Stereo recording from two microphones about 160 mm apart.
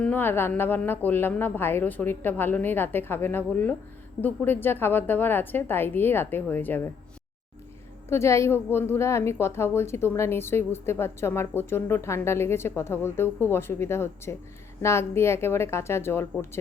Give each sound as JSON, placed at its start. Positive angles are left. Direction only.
{"t": 0.0, "sound": "a woman's voice", "side_deg": 10}
{"t": 8.1, "sound": "a woman's voice", "side_deg": 15}